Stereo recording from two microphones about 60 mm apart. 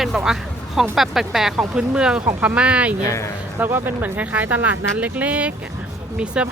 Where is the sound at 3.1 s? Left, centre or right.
Left.